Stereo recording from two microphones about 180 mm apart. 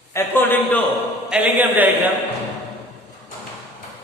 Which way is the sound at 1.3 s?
5° right (ahead or behind).